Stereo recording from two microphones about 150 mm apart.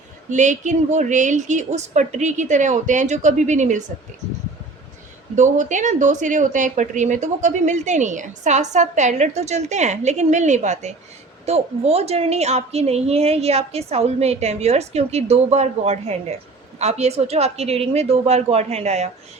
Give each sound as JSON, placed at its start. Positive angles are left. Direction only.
{"t": 0.3, "sound": "speech", "side_deg": -55}
{"t": 5.4, "sound": "speech", "side_deg": -55}